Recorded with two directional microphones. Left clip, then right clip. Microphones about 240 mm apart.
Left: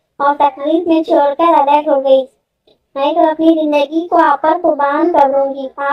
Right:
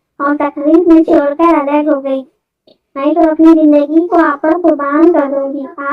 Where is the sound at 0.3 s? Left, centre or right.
Right.